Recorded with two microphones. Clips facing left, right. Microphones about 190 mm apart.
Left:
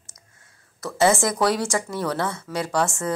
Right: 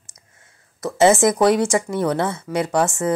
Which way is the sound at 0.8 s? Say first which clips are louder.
Right 5 dB; 20° right (ahead or behind).